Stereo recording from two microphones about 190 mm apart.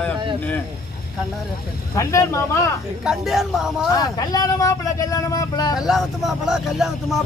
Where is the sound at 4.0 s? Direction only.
20° left (ahead or behind).